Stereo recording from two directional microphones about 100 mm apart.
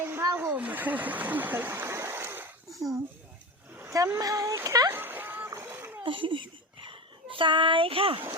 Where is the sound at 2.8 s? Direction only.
35° right (ahead or behind).